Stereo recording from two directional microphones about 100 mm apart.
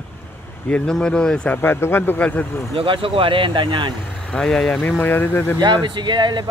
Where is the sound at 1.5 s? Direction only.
20° left (ahead or behind).